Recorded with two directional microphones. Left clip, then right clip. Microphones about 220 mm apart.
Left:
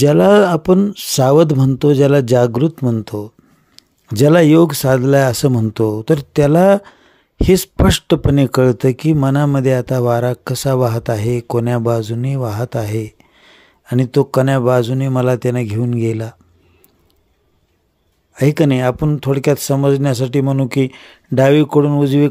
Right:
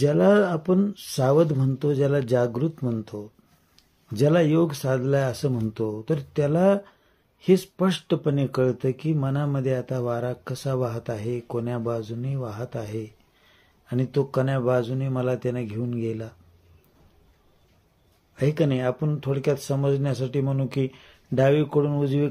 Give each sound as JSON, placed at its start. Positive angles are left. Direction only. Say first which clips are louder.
{"t": 0.0, "sound": "speech", "louder": "left 9 dB", "side_deg": 55}
{"t": 18.3, "sound": "speech", "louder": "left 9 dB", "side_deg": 55}